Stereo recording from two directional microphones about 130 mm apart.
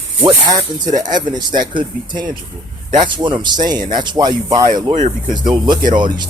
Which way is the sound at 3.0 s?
35° right (ahead or behind).